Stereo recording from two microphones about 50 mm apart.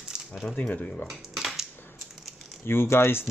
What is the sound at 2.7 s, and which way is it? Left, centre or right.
Speech, left.